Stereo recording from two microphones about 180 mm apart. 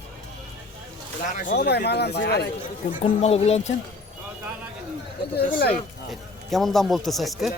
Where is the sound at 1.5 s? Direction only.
70° left (ahead or behind).